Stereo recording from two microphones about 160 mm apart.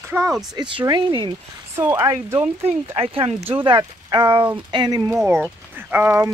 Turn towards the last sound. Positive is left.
turn(degrees=-15)  # may be behind; listen again after turning